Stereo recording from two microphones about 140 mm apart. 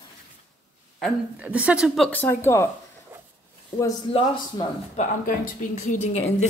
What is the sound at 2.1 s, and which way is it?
Speech, 15° left (ahead or behind).